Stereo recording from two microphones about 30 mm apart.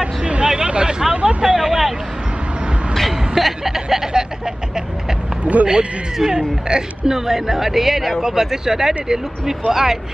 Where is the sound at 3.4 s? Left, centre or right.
Centre.